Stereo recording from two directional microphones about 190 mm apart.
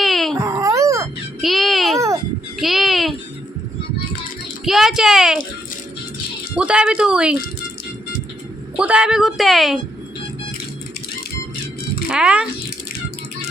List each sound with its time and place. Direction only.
0.0 s dog: centre (ahead or behind)
0.3 s dog: 15° right (ahead or behind)
1.4 s a sound: centre (ahead or behind)
4.6 s a child's voice: centre (ahead or behind)
6.6 s a woman's voice: 5° right (ahead or behind)
8.7 s a woman's voice: 5° right (ahead or behind)
12.0 s speech: 5° right (ahead or behind)